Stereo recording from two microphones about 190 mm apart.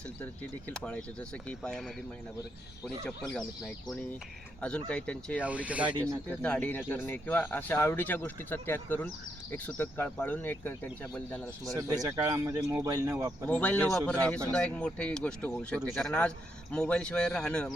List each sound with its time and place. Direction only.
0.7 s speech: 5° left (ahead or behind)
4.6 s speech: 5° left (ahead or behind)
5.4 s speech: 5° right (ahead or behind)
6.2 s speech: 5° left (ahead or behind)
11.7 s speech: 15° right (ahead or behind)
13.5 s speech: 10° left (ahead or behind)